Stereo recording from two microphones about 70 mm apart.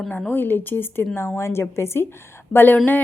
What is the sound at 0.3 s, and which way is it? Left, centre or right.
A woman's voice, left.